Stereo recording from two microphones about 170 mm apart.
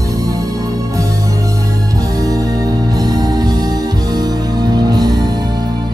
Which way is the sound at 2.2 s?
20° right (ahead or behind).